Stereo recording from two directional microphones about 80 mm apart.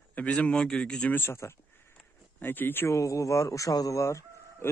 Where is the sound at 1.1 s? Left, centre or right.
Left.